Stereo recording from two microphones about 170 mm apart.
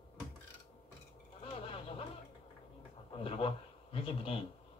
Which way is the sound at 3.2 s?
35° left (ahead or behind).